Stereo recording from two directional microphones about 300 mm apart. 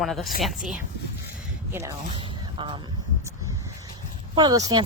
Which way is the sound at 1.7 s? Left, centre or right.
Centre.